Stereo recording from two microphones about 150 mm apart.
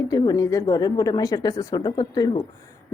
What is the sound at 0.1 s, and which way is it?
Speech, 25° left (ahead or behind).